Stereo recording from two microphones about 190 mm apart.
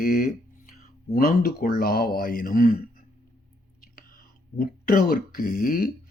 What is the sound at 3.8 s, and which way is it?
Whispering, 50° left (ahead or behind).